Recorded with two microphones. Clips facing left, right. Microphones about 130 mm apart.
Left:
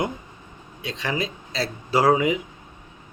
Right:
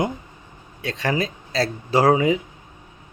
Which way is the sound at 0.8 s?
45° right (ahead or behind).